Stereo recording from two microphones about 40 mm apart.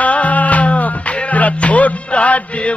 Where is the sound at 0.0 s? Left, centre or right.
Left.